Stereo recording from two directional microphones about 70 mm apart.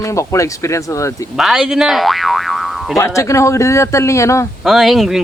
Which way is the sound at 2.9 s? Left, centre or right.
Left.